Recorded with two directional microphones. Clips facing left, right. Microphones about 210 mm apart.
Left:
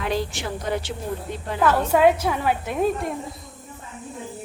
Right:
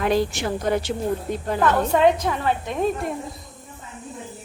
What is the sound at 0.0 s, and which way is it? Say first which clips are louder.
Speech: right 5 dB; 45° right (ahead or behind).